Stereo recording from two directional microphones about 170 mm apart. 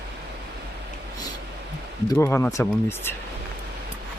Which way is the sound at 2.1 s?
10° left (ahead or behind).